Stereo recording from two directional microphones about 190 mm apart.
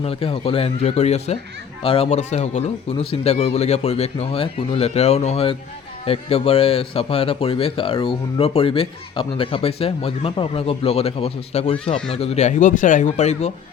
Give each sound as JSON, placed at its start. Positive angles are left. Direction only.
{"t": 0.0, "sound": "speech", "side_deg": 30}